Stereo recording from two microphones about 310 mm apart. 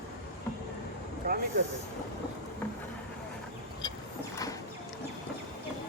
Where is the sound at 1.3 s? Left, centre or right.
Right.